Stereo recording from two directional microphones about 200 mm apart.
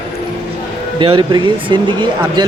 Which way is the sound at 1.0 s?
25° right (ahead or behind).